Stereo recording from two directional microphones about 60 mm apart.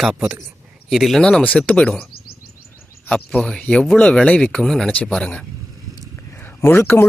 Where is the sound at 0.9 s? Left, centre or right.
Centre.